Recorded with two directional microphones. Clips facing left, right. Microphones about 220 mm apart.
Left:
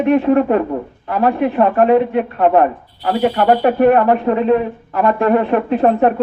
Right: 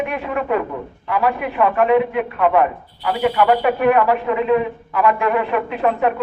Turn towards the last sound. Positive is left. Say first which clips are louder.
# left 6 dB
turn(degrees=40)  # may be behind; listen again after turning